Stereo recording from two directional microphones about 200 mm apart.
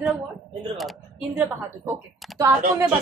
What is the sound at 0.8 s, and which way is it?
Speech, centre (ahead or behind).